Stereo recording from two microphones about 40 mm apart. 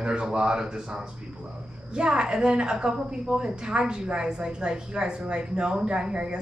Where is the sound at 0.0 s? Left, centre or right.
Right.